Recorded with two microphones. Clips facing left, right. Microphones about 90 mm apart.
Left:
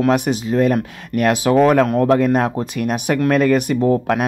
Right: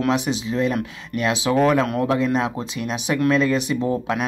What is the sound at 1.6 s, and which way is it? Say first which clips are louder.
Speech: left 5 dB; 40° left (ahead or behind).